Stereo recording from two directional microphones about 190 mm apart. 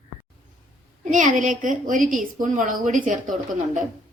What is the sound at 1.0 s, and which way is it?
A woman's voice, 40° right (ahead or behind).